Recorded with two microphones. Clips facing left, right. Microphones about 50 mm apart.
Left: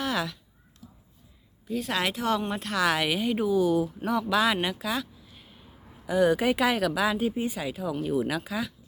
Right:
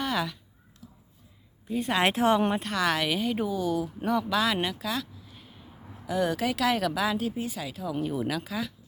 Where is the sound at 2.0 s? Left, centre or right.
Right.